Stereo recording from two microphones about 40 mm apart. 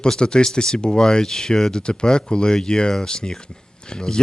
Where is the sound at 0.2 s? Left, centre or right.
Left.